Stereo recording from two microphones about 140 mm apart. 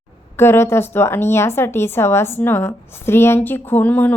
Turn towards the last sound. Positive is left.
turn(degrees=10)  # may be behind; listen again after turning